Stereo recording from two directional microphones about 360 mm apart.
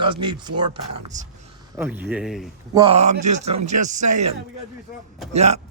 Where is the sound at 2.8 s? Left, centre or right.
Centre.